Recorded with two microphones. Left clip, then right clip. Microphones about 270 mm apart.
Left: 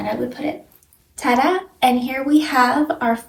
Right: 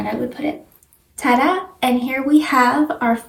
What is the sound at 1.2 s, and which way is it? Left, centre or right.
A woman's voice, centre.